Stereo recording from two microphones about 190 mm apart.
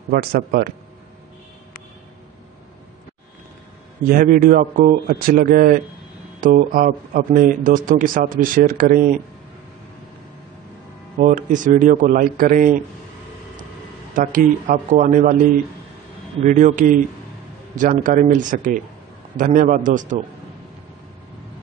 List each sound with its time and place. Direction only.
0.1 s speech: 50° right (ahead or behind)
4.0 s speech: 45° right (ahead or behind)
11.1 s speech: 40° right (ahead or behind)
14.1 s speech: 45° right (ahead or behind)
16.4 s a man's voice: 40° right (ahead or behind)